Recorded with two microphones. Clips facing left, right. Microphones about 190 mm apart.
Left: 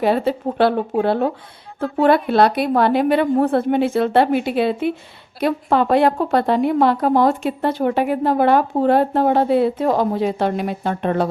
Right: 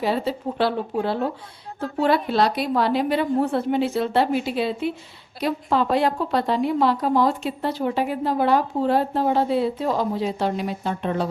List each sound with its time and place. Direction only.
0.0 s a woman's voice: 55° left (ahead or behind)